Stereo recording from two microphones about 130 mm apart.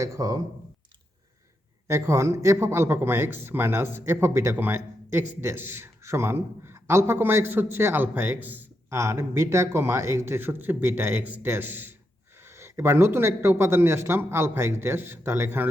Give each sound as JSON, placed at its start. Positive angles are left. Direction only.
{"t": 0.0, "sound": "speech", "side_deg": -25}
{"t": 1.9, "sound": "speech", "side_deg": -20}